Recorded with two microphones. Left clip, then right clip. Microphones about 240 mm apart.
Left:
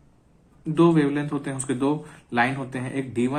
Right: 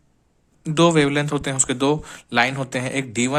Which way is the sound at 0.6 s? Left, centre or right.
Right.